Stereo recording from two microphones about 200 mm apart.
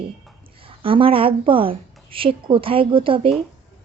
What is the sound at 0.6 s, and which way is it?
Speech, 25° right (ahead or behind).